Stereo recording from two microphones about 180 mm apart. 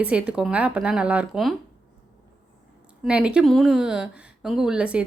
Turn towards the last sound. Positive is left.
turn(degrees=-5)  # may be behind; listen again after turning